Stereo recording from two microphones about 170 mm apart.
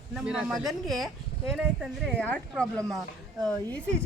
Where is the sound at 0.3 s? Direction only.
5° right (ahead or behind).